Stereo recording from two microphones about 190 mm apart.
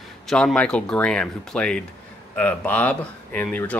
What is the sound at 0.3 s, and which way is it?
Speech, 5° left (ahead or behind).